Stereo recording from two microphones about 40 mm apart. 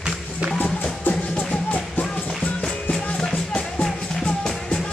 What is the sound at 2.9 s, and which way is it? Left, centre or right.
Music, left.